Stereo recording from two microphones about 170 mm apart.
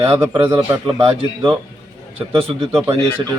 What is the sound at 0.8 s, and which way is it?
Speech, 30° right (ahead or behind).